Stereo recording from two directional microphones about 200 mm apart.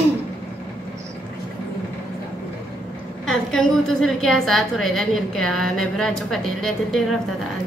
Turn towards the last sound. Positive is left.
turn(degrees=0)  # may be behind; listen again after turning